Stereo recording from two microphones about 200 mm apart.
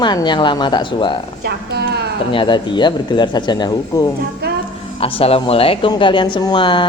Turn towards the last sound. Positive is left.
turn(degrees=25)  # may be behind; listen again after turning